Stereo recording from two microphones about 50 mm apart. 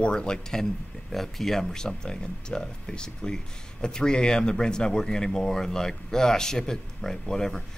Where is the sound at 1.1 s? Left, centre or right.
Centre.